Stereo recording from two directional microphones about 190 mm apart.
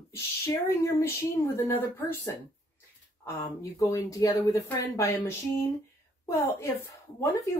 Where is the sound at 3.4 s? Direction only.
15° left (ahead or behind).